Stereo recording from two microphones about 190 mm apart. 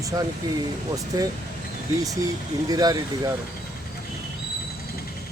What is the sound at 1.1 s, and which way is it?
Speech, 20° right (ahead or behind).